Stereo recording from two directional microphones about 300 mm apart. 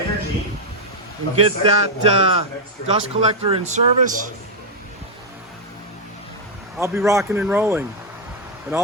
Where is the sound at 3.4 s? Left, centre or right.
Centre.